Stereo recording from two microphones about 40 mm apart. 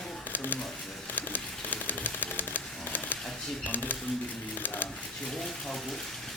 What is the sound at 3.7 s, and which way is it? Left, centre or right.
Speech, left.